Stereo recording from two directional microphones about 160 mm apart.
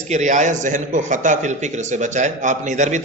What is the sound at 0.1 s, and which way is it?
A man's voice, 50° right (ahead or behind).